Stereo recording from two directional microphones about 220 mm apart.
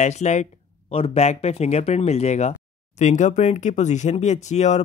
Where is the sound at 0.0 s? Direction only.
30° left (ahead or behind).